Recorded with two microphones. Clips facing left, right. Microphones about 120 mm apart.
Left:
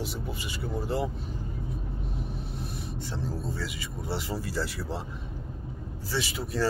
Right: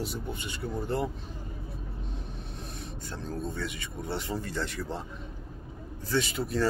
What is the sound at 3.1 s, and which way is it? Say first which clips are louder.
Speech: even; 5° left (ahead or behind).